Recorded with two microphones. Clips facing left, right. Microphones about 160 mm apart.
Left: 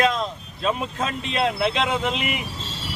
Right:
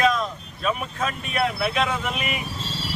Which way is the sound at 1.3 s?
25° left (ahead or behind).